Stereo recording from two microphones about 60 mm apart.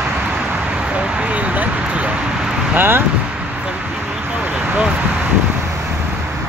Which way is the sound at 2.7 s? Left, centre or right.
Right.